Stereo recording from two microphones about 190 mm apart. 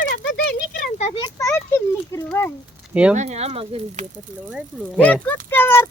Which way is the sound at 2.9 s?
5° right (ahead or behind).